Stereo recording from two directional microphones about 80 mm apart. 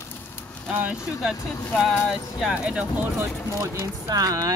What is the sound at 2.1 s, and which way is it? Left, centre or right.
Speech, centre.